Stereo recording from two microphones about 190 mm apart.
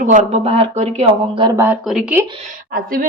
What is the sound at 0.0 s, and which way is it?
Speech, 40° right (ahead or behind).